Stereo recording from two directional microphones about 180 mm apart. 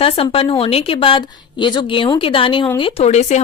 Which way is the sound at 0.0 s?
30° left (ahead or behind).